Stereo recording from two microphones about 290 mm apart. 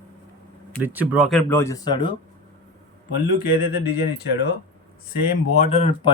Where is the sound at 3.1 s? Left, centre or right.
Left.